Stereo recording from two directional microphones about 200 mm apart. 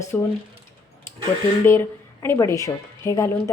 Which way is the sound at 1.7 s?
10° left (ahead or behind).